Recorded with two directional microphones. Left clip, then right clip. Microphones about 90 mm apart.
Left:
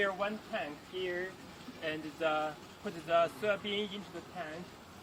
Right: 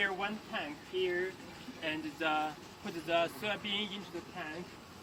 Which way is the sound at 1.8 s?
Centre (ahead or behind).